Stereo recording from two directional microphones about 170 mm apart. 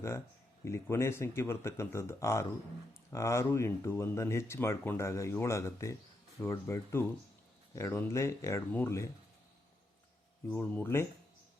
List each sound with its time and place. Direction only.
0.6 s speech: 15° left (ahead or behind)
10.5 s speech: 10° left (ahead or behind)